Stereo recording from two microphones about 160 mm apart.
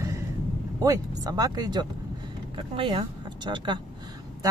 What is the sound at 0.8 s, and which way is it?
Speech, 25° right (ahead or behind).